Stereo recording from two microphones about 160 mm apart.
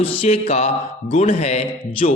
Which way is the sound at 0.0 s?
40° left (ahead or behind).